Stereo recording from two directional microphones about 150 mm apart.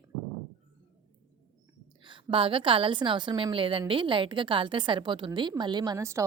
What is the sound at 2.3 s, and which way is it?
A woman's voice, 35° right (ahead or behind).